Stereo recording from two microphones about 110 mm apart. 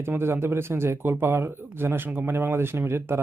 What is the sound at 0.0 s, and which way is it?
Speech, 20° right (ahead or behind).